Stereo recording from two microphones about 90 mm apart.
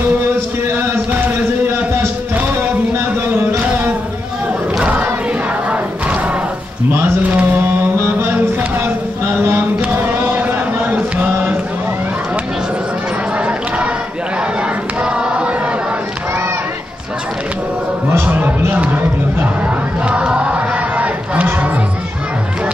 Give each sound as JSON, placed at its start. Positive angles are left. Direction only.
{"t": 0.7, "sound": "a sound", "side_deg": -25}
{"t": 3.6, "sound": "carnatic music", "side_deg": -20}
{"t": 4.7, "sound": "crowd", "side_deg": -20}
{"t": 7.0, "sound": "mantra", "side_deg": -20}
{"t": 8.0, "sound": "a sound", "side_deg": -25}
{"t": 9.8, "sound": "chant", "side_deg": -20}
{"t": 15.0, "sound": "a sound", "side_deg": -10}
{"t": 18.1, "sound": "music", "side_deg": -20}
{"t": 20.1, "sound": "crowd", "side_deg": -15}